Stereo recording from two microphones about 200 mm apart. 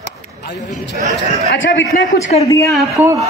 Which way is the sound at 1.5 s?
60° left (ahead or behind).